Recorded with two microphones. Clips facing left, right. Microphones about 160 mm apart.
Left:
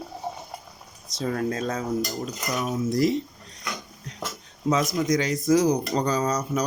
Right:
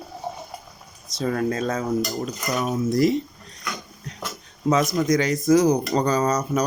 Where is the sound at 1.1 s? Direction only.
90° right.